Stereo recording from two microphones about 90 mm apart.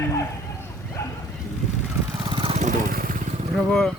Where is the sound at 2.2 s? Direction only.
75° right (ahead or behind).